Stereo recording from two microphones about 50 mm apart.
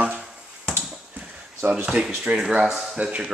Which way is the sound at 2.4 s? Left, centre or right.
Centre.